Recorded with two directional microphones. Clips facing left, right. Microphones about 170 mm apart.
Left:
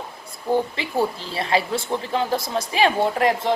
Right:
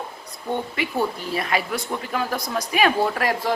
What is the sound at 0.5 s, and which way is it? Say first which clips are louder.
Speech: left 3 dB; 30° left (ahead or behind).